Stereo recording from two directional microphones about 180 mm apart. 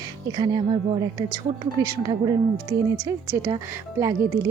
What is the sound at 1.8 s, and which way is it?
A woman's voice, 20° right (ahead or behind).